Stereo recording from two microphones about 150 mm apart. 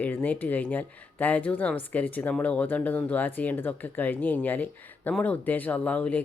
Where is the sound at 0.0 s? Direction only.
10° left (ahead or behind).